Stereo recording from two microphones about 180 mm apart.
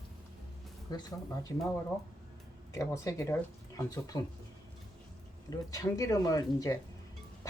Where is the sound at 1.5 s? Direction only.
15° left (ahead or behind).